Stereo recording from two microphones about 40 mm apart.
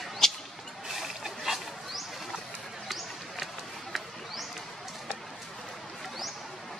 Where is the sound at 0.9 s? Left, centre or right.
Centre.